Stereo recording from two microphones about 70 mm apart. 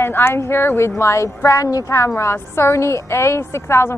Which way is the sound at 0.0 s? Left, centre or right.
Left.